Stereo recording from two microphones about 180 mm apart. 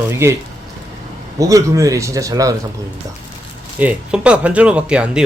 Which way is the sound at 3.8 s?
5° right (ahead or behind).